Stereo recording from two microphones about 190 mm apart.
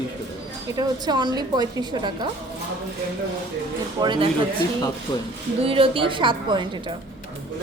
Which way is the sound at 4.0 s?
25° right (ahead or behind).